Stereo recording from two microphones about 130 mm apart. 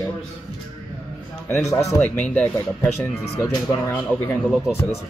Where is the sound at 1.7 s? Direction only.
25° left (ahead or behind).